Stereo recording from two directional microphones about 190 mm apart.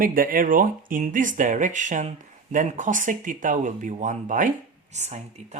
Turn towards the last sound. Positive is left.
turn(degrees=-35)  # may be behind; listen again after turning